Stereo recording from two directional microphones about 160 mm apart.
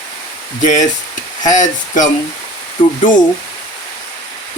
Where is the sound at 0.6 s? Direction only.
50° left (ahead or behind).